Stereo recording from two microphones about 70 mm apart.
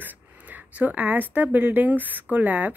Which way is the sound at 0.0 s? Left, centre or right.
Right.